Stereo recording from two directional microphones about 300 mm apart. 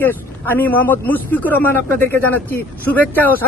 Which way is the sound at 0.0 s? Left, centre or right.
Centre.